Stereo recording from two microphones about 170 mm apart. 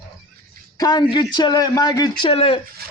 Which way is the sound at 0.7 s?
25° left (ahead or behind).